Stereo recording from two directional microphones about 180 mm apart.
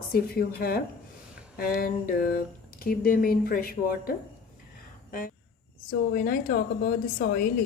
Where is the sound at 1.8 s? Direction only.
55° left (ahead or behind).